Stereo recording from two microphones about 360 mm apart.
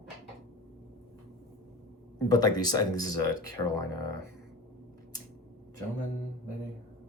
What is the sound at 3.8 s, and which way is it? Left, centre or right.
Speech, left.